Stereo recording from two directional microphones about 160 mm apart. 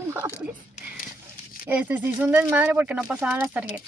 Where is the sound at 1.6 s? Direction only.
10° right (ahead or behind).